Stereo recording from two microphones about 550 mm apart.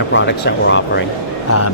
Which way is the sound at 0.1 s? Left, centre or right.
Centre.